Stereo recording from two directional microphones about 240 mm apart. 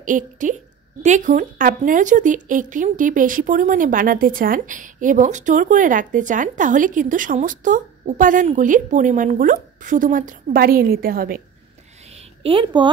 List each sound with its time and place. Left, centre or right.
0.0 s a woman's voice: right
12.4 s speech: right